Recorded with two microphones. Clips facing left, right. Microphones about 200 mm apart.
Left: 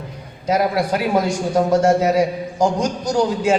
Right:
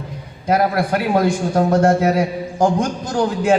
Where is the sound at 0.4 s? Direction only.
55° right (ahead or behind).